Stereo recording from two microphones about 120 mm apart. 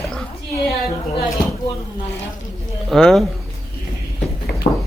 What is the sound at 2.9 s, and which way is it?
Speech, centre (ahead or behind).